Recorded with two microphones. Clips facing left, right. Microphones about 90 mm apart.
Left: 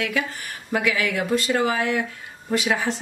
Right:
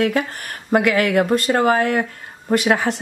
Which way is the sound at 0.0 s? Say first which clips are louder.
Right 6 dB; 50° right (ahead or behind).